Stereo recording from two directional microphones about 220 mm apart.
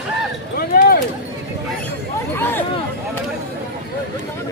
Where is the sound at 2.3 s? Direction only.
10° left (ahead or behind).